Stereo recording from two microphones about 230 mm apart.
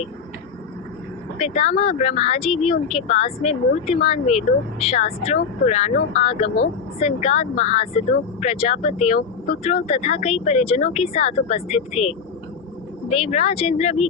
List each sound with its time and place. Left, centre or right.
1.4 s speech: left